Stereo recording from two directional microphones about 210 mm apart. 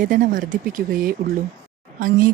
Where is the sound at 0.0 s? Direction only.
40° right (ahead or behind).